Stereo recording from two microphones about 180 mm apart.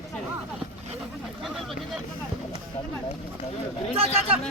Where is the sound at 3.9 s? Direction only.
35° right (ahead or behind).